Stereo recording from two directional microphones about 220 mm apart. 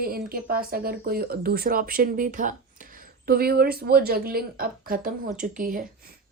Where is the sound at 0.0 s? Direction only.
40° right (ahead or behind).